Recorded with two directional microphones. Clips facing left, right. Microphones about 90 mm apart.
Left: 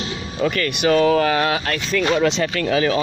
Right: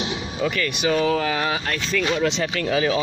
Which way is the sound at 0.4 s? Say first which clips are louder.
Left 4 dB; 60° left (ahead or behind).